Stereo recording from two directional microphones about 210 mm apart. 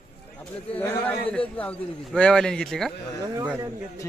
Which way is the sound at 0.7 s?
10° left (ahead or behind).